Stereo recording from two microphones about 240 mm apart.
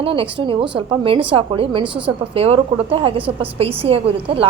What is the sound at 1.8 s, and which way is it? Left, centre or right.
Speech, centre.